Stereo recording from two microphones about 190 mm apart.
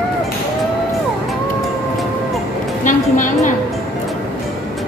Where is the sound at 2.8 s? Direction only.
45° left (ahead or behind).